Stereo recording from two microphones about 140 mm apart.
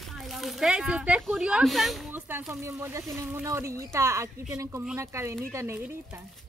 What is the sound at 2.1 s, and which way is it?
Speech, 15° right (ahead or behind).